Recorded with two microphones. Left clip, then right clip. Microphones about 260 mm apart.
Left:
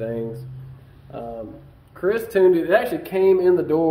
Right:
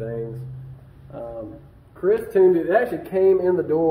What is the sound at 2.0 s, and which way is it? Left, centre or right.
A man's voice, left.